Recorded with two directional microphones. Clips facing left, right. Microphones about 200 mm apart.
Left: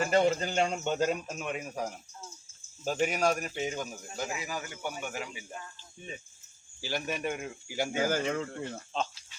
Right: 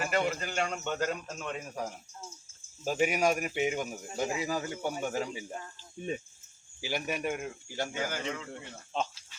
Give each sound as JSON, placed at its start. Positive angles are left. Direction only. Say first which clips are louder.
{"t": 0.0, "sound": "a man's voice", "louder": "left 5 dB", "side_deg": 30}
{"t": 1.7, "sound": "speech", "louder": "left 2 dB", "side_deg": 0}
{"t": 6.8, "sound": "speech", "louder": "even", "side_deg": -10}
{"t": 7.9, "sound": "speech", "louder": "left 10 dB", "side_deg": 40}